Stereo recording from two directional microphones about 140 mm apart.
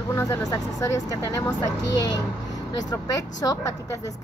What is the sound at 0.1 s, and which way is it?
Speech, 20° left (ahead or behind).